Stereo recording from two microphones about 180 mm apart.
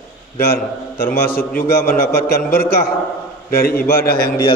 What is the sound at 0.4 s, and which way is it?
A man's voice, 60° left (ahead or behind).